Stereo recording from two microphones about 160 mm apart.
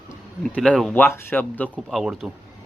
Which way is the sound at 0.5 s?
5° left (ahead or behind).